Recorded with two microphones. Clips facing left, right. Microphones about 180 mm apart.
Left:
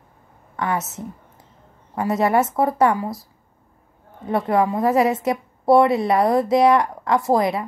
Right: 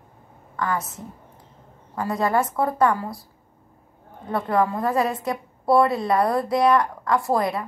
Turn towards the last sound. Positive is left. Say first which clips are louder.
# left 3 dB
turn(degrees=20)  # may be behind; listen again after turning